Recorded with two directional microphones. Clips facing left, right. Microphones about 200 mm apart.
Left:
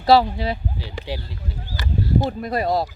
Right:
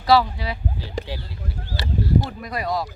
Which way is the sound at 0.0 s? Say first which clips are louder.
Left 2 dB; 25° left (ahead or behind).